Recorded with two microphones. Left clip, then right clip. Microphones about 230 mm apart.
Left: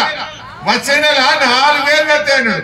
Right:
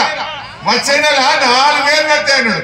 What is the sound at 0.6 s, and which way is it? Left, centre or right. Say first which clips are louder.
A man's voice: even; centre.